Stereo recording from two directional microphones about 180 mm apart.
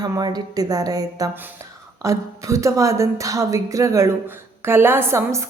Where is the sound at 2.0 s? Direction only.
15° right (ahead or behind).